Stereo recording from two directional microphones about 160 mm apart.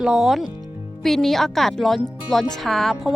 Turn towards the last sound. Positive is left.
turn(degrees=0)  # may be behind; listen again after turning